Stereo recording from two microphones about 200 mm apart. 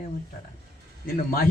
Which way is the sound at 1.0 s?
45° left (ahead or behind).